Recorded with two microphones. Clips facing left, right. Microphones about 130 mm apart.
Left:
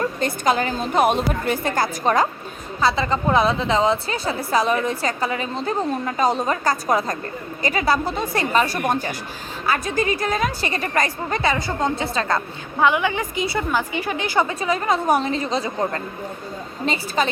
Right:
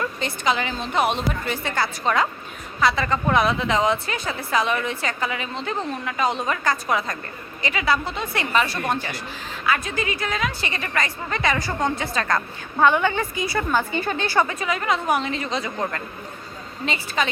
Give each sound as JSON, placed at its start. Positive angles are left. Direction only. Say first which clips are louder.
{"t": 0.2, "sound": "a woman's voice", "louder": "left 3 dB", "side_deg": 45}
{"t": 2.8, "sound": "a woman's voice", "louder": "left 1 dB", "side_deg": 30}
{"t": 11.4, "sound": "a woman's voice", "louder": "left 1 dB", "side_deg": 25}
{"t": 12.8, "sound": "a woman's voice", "louder": "even", "side_deg": 10}
{"t": 13.3, "sound": "a woman's voice", "louder": "left 2 dB", "side_deg": 25}
{"t": 13.7, "sound": "a woman's voice", "louder": "even", "side_deg": 10}
{"t": 14.4, "sound": "a woman's voice", "louder": "left 3 dB", "side_deg": 30}
{"t": 16.8, "sound": "a woman's voice", "louder": "left 3 dB", "side_deg": 35}